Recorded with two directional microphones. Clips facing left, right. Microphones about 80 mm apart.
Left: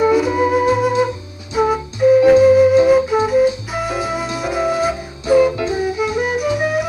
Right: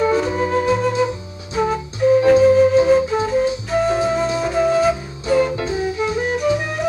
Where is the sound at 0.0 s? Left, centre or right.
Centre.